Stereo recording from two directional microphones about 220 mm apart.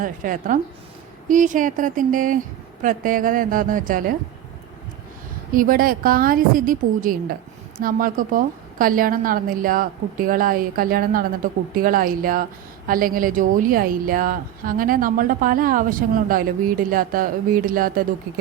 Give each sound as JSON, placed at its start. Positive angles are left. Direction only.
{"t": 0.0, "sound": "a woman's voice", "side_deg": -35}
{"t": 5.5, "sound": "a woman's voice", "side_deg": -40}